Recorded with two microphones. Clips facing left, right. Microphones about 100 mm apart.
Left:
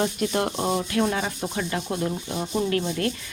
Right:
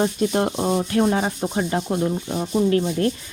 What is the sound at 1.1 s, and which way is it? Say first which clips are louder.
Speech: right 5 dB; 35° right (ahead or behind).